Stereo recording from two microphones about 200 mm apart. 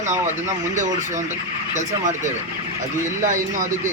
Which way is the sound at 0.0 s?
35° right (ahead or behind).